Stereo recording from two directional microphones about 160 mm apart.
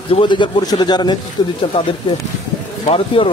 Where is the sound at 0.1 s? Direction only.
30° left (ahead or behind).